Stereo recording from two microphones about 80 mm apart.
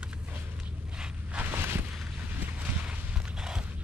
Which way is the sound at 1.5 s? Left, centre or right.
Right.